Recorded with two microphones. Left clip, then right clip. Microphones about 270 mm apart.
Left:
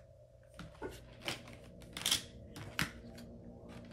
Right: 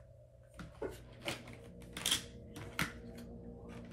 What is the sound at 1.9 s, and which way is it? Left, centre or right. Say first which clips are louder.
Typewriter: left 1 dB; left.